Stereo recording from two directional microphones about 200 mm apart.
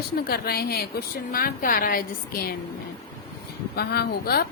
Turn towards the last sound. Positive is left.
turn(degrees=50)  # may be behind; listen again after turning